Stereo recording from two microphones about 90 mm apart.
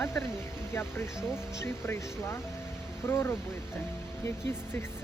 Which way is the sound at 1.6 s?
30° left (ahead or behind).